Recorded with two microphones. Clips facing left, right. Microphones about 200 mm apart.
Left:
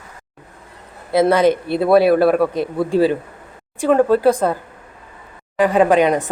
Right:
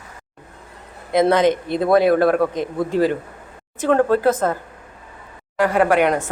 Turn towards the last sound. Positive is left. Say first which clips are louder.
# left 3 dB
turn(degrees=15)  # may be behind; listen again after turning